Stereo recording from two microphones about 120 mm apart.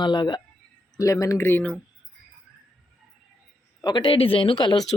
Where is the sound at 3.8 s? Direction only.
35° left (ahead or behind).